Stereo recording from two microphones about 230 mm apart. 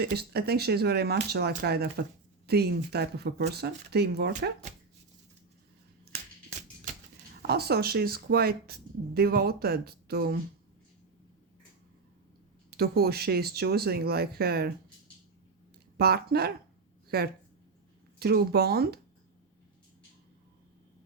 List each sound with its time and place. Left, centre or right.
0.0 s speech: right
6.5 s music: right
7.4 s speech: right
12.7 s speech: right
16.0 s speech: right